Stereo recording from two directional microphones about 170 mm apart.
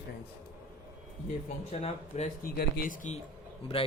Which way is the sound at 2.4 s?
60° left (ahead or behind).